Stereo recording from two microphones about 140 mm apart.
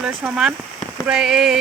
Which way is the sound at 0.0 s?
5° right (ahead or behind).